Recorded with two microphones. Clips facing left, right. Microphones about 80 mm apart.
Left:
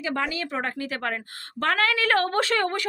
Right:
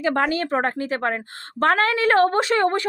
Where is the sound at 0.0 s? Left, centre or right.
Right.